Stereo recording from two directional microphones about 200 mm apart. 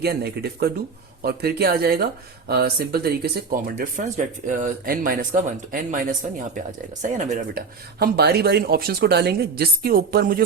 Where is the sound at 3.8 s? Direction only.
40° right (ahead or behind).